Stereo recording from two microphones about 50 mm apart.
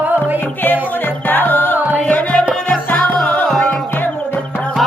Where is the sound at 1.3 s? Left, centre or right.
Left.